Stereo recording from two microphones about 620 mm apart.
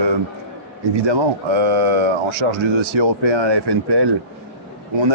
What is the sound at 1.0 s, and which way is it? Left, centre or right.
Speech, right.